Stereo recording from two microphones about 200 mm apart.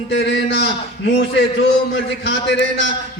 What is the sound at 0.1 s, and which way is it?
A man's voice, 60° left (ahead or behind).